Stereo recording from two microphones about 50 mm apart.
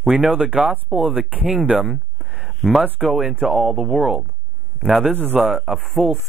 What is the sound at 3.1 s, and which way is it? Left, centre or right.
Speech, centre.